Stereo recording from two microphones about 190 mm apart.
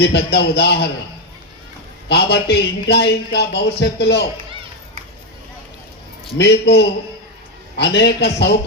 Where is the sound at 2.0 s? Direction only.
65° left (ahead or behind).